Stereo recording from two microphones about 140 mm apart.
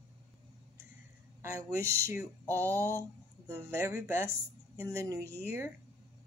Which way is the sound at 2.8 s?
15° left (ahead or behind).